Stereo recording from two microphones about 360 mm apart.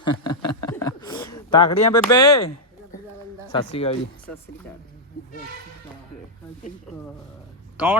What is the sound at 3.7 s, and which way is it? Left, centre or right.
Speech, centre.